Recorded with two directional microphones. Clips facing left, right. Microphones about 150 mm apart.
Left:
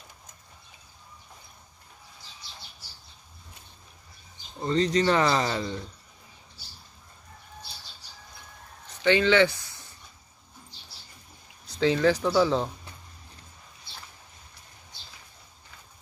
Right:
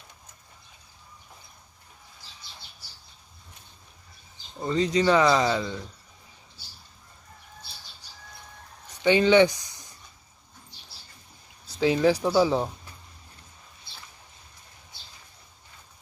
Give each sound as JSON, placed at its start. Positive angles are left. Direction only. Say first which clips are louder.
{"t": 4.6, "sound": "speech", "louder": "right 1 dB", "side_deg": 0}
{"t": 8.8, "sound": "a sound", "louder": "right 2 dB", "side_deg": -15}
{"t": 11.6, "sound": "speech", "louder": "right 1 dB", "side_deg": -10}